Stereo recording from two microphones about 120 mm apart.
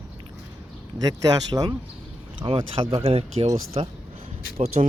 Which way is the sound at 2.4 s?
45° right (ahead or behind).